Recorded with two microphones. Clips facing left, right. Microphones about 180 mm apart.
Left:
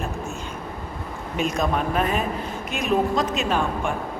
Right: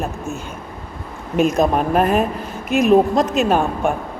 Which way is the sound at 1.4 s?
50° right (ahead or behind).